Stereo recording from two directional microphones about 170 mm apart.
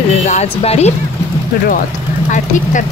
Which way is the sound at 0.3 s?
40° left (ahead or behind).